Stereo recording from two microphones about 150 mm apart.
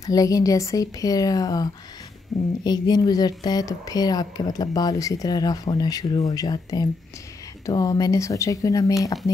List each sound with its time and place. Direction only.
0.0 s speech: 25° left (ahead or behind)